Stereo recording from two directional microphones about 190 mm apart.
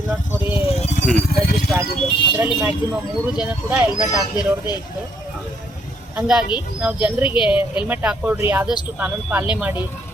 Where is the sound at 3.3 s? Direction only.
5° right (ahead or behind).